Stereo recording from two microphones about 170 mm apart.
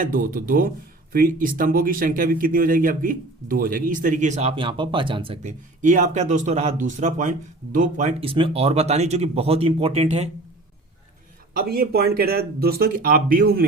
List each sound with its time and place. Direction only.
0.0 s speech: 55° right (ahead or behind)
8.2 s speech: 35° right (ahead or behind)
11.5 s speech: 65° right (ahead or behind)